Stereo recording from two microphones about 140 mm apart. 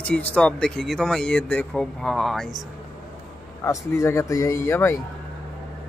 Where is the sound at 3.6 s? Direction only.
20° left (ahead or behind).